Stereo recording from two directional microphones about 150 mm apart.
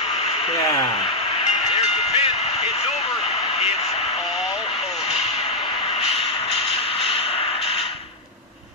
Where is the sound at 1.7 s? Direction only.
40° left (ahead or behind).